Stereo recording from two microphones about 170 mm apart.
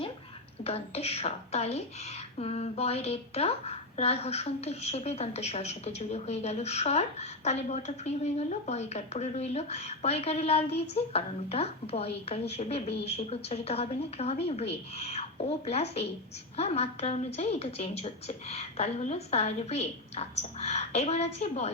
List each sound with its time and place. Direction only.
0.6 s a woman's voice: 35° left (ahead or behind)